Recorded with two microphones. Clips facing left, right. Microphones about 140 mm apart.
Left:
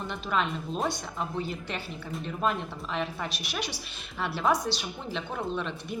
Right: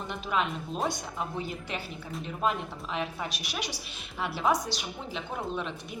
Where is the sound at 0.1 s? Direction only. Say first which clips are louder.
Even; 10° right (ahead or behind).